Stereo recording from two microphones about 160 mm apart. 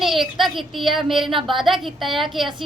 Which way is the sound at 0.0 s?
Centre (ahead or behind).